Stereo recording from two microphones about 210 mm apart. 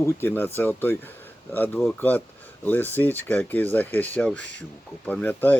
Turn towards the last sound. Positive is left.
turn(degrees=10)  # may be behind; listen again after turning